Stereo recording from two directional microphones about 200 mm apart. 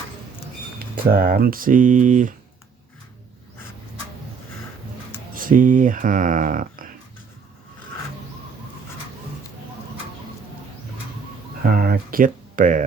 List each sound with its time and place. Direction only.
1.1 s speech: 45° right (ahead or behind)
5.3 s speech: 45° right (ahead or behind)
11.6 s speech: 45° right (ahead or behind)